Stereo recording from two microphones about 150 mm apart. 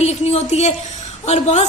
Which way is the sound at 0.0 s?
45° left (ahead or behind).